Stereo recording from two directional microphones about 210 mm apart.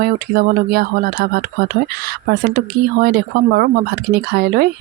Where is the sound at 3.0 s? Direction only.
45° right (ahead or behind).